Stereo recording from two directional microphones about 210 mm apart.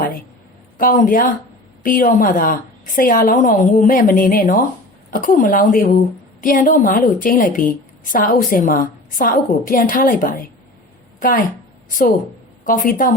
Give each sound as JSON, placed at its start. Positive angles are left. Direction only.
{"t": 0.8, "sound": "a woman's voice", "side_deg": 40}
{"t": 12.6, "sound": "a woman's voice", "side_deg": 40}